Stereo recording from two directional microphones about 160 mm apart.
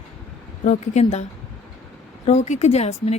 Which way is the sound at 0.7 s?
45° left (ahead or behind).